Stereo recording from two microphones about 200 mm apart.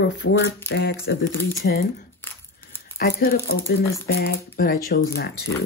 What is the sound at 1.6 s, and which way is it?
Speech, 50° left (ahead or behind).